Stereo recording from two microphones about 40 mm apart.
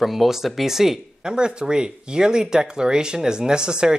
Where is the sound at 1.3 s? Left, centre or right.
Right.